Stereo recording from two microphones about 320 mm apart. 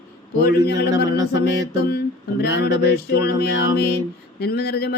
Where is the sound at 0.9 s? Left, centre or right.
Centre.